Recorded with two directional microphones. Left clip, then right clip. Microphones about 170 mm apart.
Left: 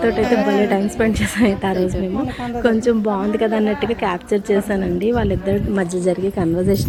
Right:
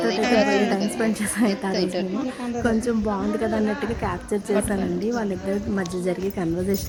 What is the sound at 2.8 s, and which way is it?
A woman's voice, 15° left (ahead or behind).